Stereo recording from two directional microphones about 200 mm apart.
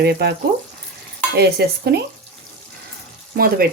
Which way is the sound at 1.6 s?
55° right (ahead or behind).